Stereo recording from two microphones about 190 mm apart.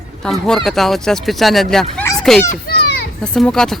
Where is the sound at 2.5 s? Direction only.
55° left (ahead or behind).